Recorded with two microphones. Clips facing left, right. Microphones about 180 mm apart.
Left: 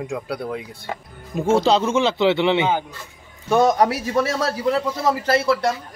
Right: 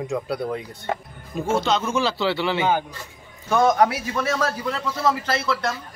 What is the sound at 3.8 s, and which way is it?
Speech, 35° left (ahead or behind).